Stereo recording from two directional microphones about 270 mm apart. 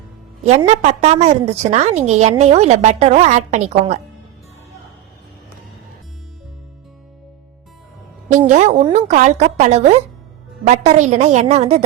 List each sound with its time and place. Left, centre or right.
0.4 s a woman's voice: right
8.4 s a woman's voice: right